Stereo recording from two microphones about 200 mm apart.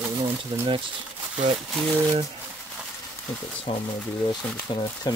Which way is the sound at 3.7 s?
25° left (ahead or behind).